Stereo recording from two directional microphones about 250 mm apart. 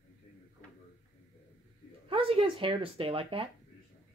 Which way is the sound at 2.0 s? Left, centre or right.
Right.